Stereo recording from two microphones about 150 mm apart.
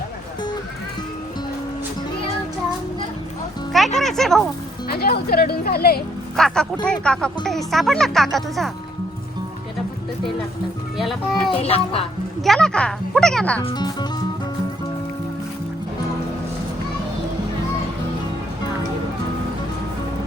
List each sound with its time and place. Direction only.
3.7 s music: centre (ahead or behind)
4.9 s speech: 90° left
6.3 s speech: 5° left (ahead or behind)
10.9 s speech: centre (ahead or behind)
11.5 s speech: 40° left (ahead or behind)
12.4 s speech: 5° left (ahead or behind)
13.7 s speech: 30° left (ahead or behind)